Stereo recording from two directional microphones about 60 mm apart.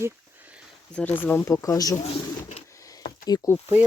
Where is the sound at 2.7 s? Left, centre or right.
Left.